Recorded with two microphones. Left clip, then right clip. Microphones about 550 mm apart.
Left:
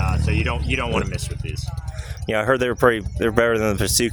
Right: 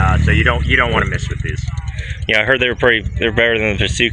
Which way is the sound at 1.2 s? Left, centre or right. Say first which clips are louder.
Right 7 dB; left.